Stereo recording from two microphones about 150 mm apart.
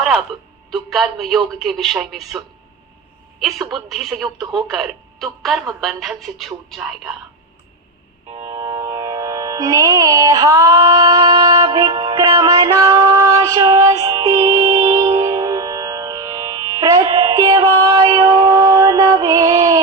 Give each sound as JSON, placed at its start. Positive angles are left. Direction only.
{"t": 0.7, "sound": "a woman's voice", "side_deg": 0}
{"t": 3.4, "sound": "a woman's voice", "side_deg": 0}
{"t": 8.4, "sound": "music", "side_deg": -20}